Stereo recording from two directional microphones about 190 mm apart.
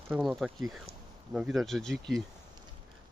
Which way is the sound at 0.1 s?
Centre (ahead or behind).